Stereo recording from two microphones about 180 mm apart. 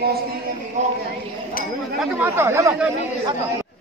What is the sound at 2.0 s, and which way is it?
Speech, 5° right (ahead or behind).